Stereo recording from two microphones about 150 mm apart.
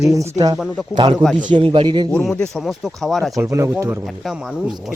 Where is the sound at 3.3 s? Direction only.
20° right (ahead or behind).